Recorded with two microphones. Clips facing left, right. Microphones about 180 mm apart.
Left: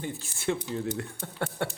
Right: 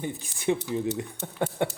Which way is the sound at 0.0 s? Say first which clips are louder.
Right 3 dB; 15° right (ahead or behind).